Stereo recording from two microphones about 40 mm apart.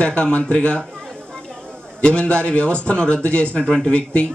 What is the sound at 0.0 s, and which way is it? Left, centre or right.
Speech, left.